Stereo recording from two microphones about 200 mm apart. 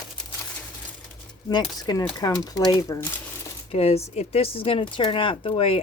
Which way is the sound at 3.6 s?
30° left (ahead or behind).